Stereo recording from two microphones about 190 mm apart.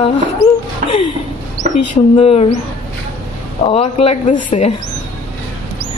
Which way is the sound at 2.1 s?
30° left (ahead or behind).